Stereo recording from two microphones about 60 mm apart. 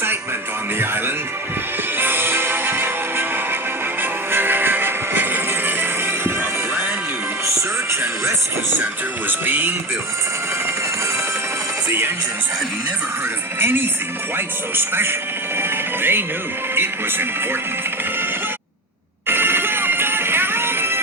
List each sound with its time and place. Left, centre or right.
2.0 s music: right
9.5 s speech: right
11.9 s music: right
13.6 s speech: right
15.5 s music: right
16.7 s speech: right
19.3 s music: right